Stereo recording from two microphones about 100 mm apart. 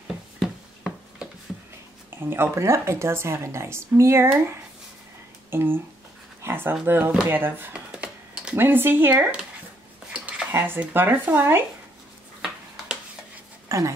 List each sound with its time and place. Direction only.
0.4 s a sound: centre (ahead or behind)
2.2 s speech: 25° right (ahead or behind)
5.5 s speech: 25° right (ahead or behind)
7.9 s typing: 10° right (ahead or behind)
8.5 s speech: 20° right (ahead or behind)
10.1 s a sound: 10° right (ahead or behind)
10.5 s speech: 20° right (ahead or behind)
13.7 s dog: 35° right (ahead or behind)